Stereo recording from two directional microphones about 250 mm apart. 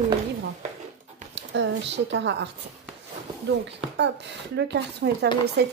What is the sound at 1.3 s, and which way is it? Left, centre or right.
Speech, right.